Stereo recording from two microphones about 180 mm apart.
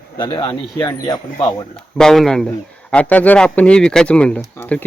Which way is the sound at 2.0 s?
5° left (ahead or behind).